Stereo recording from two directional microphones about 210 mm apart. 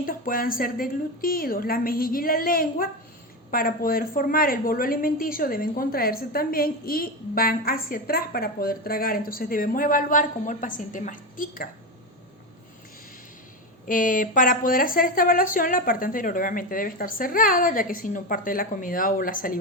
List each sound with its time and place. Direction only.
0.0 s a woman's voice: 40° left (ahead or behind)
13.8 s a woman's voice: 40° left (ahead or behind)